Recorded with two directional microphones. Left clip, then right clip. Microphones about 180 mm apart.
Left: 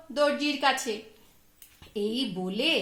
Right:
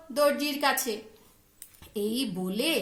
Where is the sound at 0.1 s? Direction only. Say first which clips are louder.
Even; 35° left (ahead or behind).